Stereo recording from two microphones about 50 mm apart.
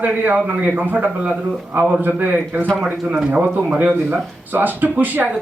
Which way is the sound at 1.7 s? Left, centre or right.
Right.